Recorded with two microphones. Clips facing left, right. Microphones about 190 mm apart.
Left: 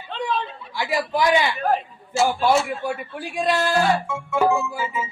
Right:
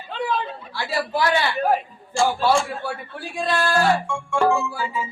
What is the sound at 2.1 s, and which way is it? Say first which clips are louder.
Music: even; 5° left (ahead or behind).